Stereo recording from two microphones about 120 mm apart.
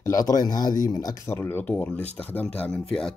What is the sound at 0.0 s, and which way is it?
Speech, 30° left (ahead or behind).